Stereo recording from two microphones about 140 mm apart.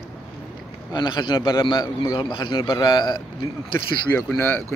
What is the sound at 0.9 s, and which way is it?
A man's voice, 30° left (ahead or behind).